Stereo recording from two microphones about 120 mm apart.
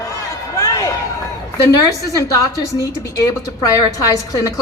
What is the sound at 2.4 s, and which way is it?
Speech, 30° left (ahead or behind).